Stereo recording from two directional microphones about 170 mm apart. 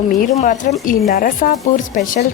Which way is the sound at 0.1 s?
50° left (ahead or behind).